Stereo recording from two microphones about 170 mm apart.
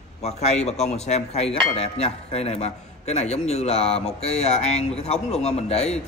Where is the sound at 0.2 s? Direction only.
40° left (ahead or behind).